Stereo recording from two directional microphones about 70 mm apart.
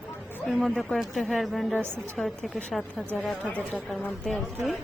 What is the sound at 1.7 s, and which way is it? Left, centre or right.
Speech, right.